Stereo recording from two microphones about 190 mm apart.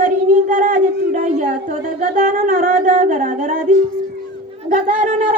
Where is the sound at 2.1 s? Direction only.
45° right (ahead or behind).